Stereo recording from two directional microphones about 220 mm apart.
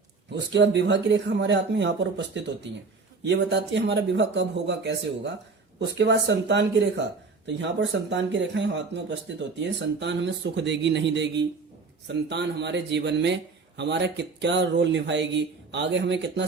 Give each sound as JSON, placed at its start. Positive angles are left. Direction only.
{"t": 0.3, "sound": "speech", "side_deg": -55}